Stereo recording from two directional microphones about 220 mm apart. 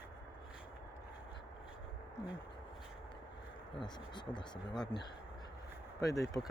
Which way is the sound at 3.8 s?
20° left (ahead or behind).